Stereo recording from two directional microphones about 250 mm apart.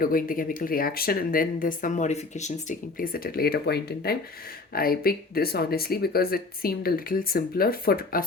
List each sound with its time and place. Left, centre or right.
0.0 s speech: left